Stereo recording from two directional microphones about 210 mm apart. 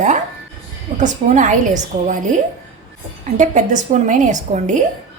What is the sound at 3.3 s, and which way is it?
A woman's voice, 35° right (ahead or behind).